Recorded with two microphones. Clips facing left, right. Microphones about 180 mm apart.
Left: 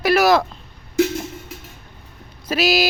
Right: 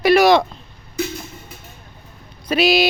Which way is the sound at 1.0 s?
90° left.